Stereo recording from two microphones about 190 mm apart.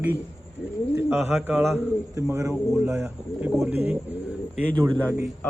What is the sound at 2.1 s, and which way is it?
Speech, 15° right (ahead or behind).